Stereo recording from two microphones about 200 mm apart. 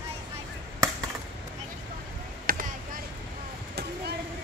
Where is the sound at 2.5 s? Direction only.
45° right (ahead or behind).